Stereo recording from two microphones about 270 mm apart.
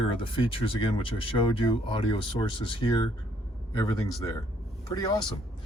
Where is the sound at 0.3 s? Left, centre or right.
Centre.